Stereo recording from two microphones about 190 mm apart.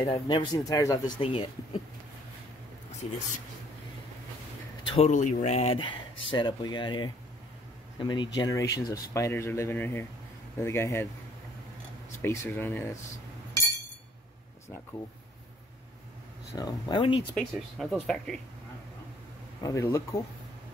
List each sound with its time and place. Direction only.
0.1 s speech: 25° left (ahead or behind)
1.1 s speech: 30° left (ahead or behind)
4.8 s speech: 35° left (ahead or behind); by 11.1 s 15° left (ahead or behind)
12.2 s speech: 10° left (ahead or behind)
16.5 s speech: 20° left (ahead or behind)
17.4 s speech: 5° left (ahead or behind)
19.6 s speech: 15° left (ahead or behind)